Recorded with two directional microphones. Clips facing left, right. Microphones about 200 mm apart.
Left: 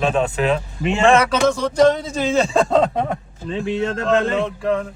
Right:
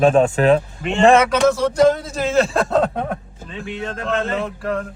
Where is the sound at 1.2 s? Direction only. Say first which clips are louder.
Right 2 dB; 5° right (ahead or behind).